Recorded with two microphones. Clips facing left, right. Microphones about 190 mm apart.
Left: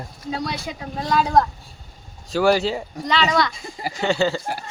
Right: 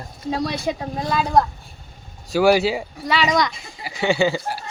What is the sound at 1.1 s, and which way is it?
Speech, 5° right (ahead or behind).